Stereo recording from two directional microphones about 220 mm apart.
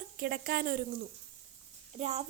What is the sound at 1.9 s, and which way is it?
Speech, 30° right (ahead or behind).